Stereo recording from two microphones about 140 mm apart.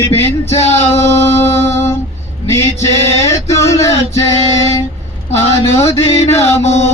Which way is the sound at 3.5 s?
20° left (ahead or behind).